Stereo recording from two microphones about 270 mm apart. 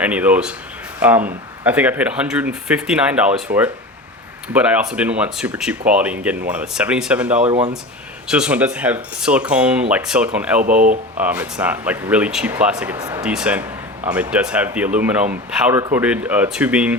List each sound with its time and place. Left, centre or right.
0.0 s speech: centre
7.4 s speech: right
8.3 s speech: centre
10.6 s speech: right
11.2 s speech: centre